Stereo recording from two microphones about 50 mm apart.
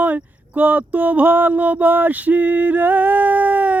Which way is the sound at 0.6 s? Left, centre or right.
Right.